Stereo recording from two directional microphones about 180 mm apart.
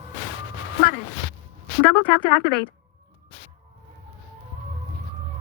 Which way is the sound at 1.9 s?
10° left (ahead or behind).